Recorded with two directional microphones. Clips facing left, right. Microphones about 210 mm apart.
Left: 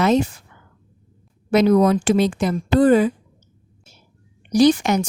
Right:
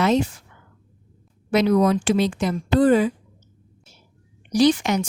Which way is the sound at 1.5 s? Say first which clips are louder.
Left 3 dB; 45° left (ahead or behind).